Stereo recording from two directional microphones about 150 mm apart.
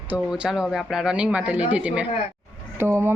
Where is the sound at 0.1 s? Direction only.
5° right (ahead or behind).